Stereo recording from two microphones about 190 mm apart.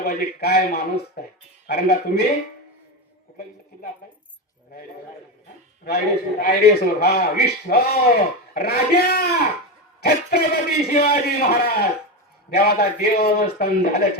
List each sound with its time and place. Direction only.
0.0 s a man's voice: 55° left (ahead or behind)
5.8 s a man's voice: 55° left (ahead or behind)